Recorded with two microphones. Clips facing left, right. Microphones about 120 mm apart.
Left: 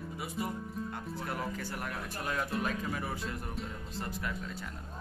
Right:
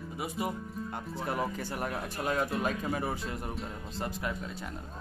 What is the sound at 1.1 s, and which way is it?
Speech, 25° right (ahead or behind).